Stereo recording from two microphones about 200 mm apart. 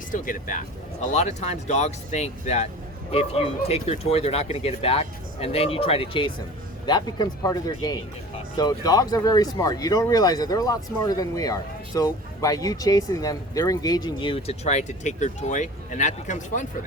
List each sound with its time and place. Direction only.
0.1 s speech: 40° left (ahead or behind)